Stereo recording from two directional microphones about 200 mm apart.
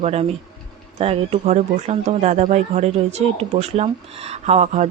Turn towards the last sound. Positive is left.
turn(degrees=-35)  # may be behind; listen again after turning